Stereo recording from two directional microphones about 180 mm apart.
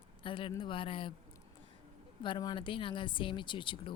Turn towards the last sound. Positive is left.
turn(degrees=25)  # may be behind; listen again after turning